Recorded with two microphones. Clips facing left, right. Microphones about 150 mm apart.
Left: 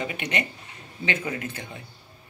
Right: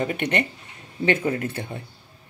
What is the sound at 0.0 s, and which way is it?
Speech, 50° right (ahead or behind).